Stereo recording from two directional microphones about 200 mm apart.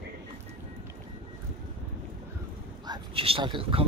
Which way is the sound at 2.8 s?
25° right (ahead or behind).